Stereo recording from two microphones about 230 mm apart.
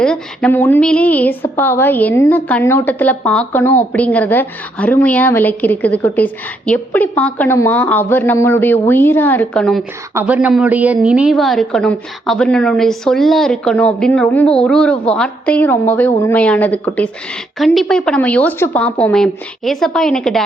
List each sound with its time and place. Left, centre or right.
0.0 s a woman's voice: centre